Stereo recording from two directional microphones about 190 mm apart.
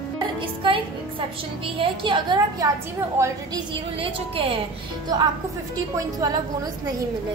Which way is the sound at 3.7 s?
30° right (ahead or behind).